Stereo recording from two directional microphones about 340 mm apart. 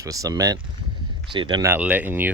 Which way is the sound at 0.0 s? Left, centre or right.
Centre.